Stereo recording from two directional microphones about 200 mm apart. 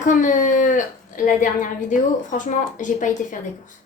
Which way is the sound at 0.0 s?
40° left (ahead or behind).